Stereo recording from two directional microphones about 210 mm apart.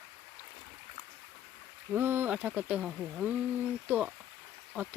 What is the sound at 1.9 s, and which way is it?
Speech, 10° right (ahead or behind).